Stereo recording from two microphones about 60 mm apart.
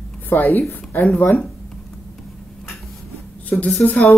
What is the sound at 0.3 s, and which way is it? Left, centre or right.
Speech, left.